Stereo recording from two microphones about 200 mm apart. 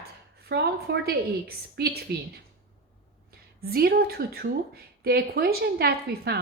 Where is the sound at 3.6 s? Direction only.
50° right (ahead or behind).